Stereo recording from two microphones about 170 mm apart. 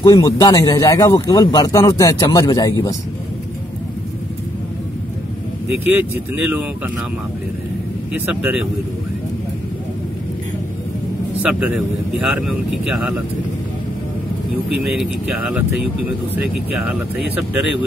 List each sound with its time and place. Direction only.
0.0 s speech: 25° left (ahead or behind)
5.9 s speech: 10° right (ahead or behind)
8.3 s speech: 5° right (ahead or behind)
11.4 s speech: 5° right (ahead or behind)
14.8 s speech: 5° right (ahead or behind)
17.4 s speech: 5° right (ahead or behind)